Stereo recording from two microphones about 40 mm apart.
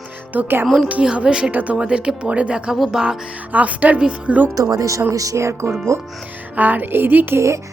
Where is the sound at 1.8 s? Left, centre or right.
Right.